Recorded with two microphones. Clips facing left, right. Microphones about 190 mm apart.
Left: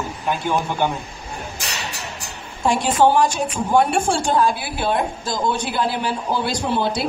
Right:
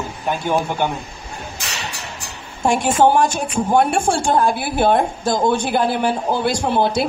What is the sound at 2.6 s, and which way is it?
A woman's voice, 50° right (ahead or behind).